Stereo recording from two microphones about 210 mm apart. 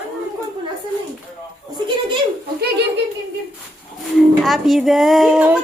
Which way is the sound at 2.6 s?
50° right (ahead or behind).